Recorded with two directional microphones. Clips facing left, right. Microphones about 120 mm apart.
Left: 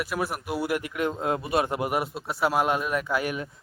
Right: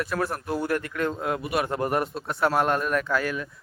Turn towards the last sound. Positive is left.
turn(degrees=20)  # may be behind; listen again after turning